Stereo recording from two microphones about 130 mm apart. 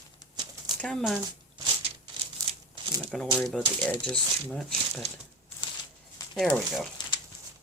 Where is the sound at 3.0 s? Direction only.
5° left (ahead or behind).